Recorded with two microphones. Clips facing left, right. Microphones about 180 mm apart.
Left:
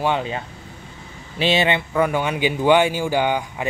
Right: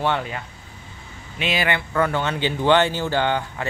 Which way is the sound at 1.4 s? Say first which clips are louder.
Left 5 dB; 25° left (ahead or behind).